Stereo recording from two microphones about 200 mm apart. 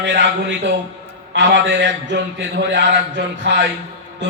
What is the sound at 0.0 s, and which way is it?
A man's voice, 65° right (ahead or behind).